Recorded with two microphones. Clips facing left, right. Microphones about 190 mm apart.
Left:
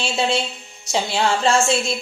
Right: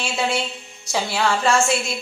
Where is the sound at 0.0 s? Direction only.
25° left (ahead or behind).